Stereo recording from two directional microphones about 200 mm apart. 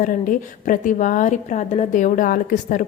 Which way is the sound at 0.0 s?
40° left (ahead or behind).